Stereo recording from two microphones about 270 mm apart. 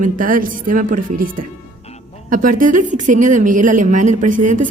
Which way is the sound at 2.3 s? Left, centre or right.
Right.